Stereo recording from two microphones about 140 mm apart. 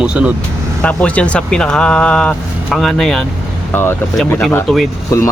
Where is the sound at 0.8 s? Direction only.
10° left (ahead or behind).